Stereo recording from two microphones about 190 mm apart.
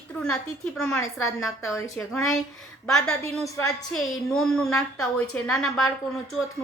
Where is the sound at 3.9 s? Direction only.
5° left (ahead or behind).